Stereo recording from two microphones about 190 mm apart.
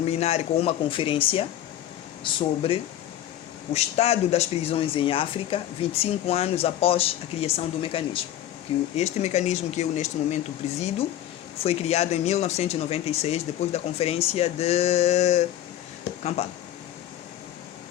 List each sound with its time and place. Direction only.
0.0 s speech: 35° left (ahead or behind)